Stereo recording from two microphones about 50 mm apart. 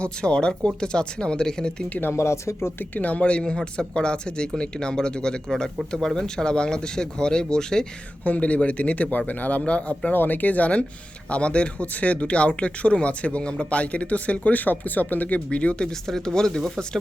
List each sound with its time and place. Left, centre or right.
0.0 s speech: centre
1.9 s speech: left
2.1 s speech: left
2.9 s speech: left; by 7.9 s centre
8.2 s speech: left
10.1 s speech: left
15.4 s speech: left
16.0 s speech: centre